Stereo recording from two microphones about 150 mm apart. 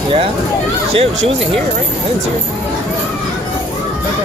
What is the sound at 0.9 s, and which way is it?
Speech, 40° right (ahead or behind).